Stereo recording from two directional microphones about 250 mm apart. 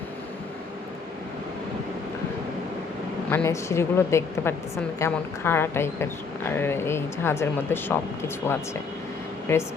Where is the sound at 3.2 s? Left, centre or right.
Centre.